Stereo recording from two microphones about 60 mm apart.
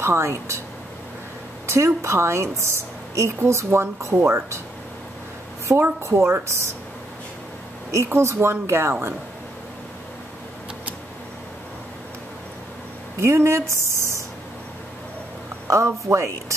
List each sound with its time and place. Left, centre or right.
0.0 s a woman's voice: right
1.7 s a woman's voice: right
4.1 s speech: right
5.8 s a woman's voice: right
7.9 s a woman's voice: right
13.2 s a woman's voice: right
15.6 s speech: right